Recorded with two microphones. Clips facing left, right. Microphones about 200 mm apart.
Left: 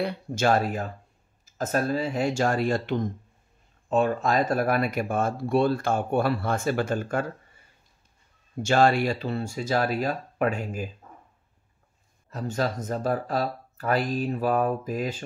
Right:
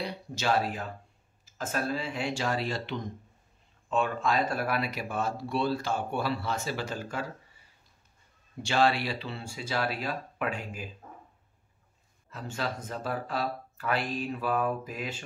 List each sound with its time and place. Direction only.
0.0 s speech: 50° left (ahead or behind)
8.6 s speech: 45° left (ahead or behind)
12.3 s speech: 40° left (ahead or behind)